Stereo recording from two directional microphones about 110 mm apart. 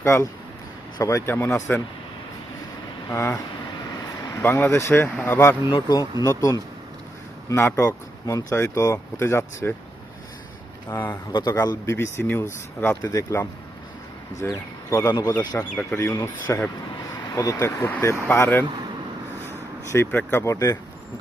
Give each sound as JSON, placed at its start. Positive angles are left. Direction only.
{"t": 0.0, "sound": "speech", "side_deg": 30}
{"t": 4.0, "sound": "vehicle", "side_deg": 40}
{"t": 4.4, "sound": "speech", "side_deg": 20}
{"t": 5.7, "sound": "speech", "side_deg": 40}
{"t": 10.8, "sound": "speech", "side_deg": 20}
{"t": 11.3, "sound": "speech", "side_deg": 40}
{"t": 11.9, "sound": "speech", "side_deg": 25}
{"t": 15.7, "sound": "speech", "side_deg": 15}
{"t": 16.0, "sound": "speech", "side_deg": 25}
{"t": 20.1, "sound": "speech", "side_deg": 15}
{"t": 20.4, "sound": "speech", "side_deg": 30}